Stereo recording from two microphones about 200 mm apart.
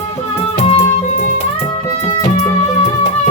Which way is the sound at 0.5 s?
30° left (ahead or behind).